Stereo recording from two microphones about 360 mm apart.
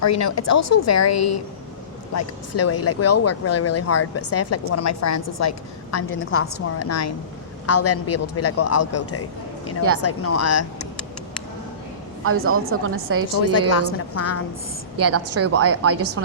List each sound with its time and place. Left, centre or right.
0.0 s speech: left
12.4 s a woman's voice: right
13.4 s speech: left
14.9 s a woman's voice: right